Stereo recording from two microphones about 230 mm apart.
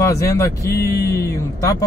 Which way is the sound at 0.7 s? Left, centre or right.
Left.